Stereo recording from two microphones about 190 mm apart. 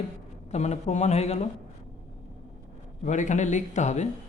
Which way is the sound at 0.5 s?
35° left (ahead or behind).